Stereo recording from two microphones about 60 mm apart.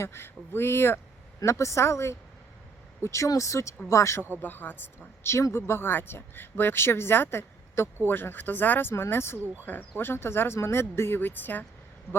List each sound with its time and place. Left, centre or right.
0.0 s speech: left
1.5 s a woman's voice: left
3.2 s speech: left
4.4 s speech: left
5.2 s speech: left
9.6 s speech: left